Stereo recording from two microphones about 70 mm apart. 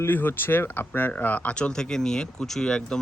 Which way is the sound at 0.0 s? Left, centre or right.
Left.